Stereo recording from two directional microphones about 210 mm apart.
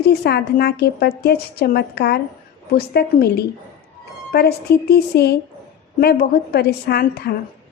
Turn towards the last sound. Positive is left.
turn(degrees=50)  # may be behind; listen again after turning